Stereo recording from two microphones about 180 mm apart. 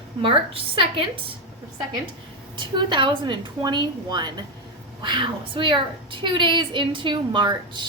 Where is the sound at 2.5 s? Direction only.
25° right (ahead or behind).